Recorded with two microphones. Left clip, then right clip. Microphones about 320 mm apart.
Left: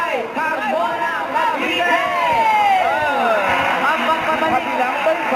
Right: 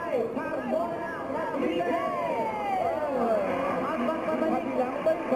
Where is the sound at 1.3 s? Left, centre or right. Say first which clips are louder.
Left 9 dB; centre.